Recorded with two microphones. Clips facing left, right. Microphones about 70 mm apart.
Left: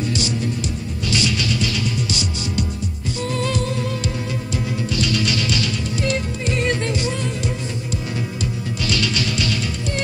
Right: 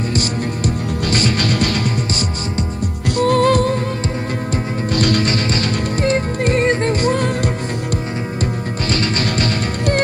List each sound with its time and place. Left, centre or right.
1.0 s music: right
3.2 s music: right
4.9 s music: right
8.8 s music: right